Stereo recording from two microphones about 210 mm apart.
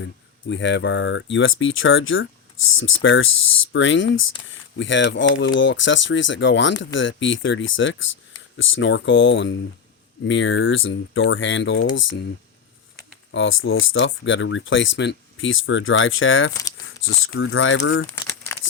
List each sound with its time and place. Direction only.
0.0 s speech: 60° left (ahead or behind)
13.3 s speech: 65° left (ahead or behind)
18.3 s crumpling: 10° left (ahead or behind)